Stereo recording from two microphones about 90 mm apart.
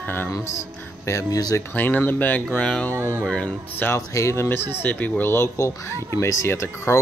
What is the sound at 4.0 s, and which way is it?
Speech, 35° left (ahead or behind).